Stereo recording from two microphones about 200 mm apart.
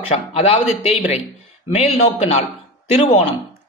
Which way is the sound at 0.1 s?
35° left (ahead or behind).